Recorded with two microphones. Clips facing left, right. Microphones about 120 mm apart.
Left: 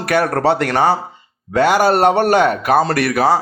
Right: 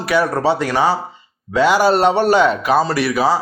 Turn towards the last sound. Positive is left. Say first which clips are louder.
# left 2 dB
turn(degrees=60)  # may be behind; listen again after turning